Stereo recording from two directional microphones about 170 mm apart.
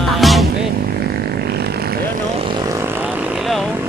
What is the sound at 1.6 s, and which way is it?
Vehicle, 65° right (ahead or behind).